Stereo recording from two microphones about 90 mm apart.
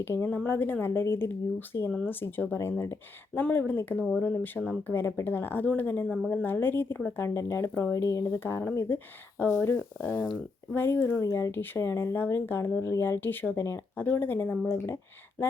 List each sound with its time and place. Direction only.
0.0 s speech: 25° left (ahead or behind)
10.8 s speech: 25° left (ahead or behind)